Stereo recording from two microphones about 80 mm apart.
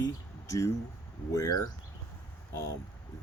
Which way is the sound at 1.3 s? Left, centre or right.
Left.